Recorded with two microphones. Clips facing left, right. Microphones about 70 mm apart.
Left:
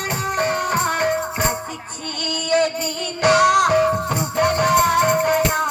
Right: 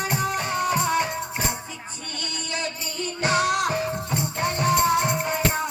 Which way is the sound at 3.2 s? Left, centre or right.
Left.